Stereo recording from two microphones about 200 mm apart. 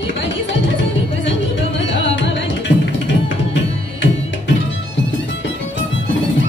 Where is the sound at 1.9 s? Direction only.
65° left (ahead or behind).